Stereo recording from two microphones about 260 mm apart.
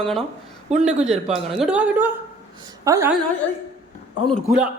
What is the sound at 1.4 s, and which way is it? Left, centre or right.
A man's voice, centre.